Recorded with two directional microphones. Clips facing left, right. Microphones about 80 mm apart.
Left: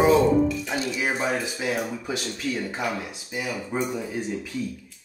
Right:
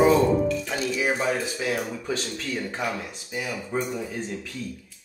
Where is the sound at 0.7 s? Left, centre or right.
Left.